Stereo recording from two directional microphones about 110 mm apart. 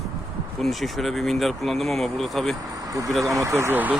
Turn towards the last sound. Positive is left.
turn(degrees=-15)  # may be behind; listen again after turning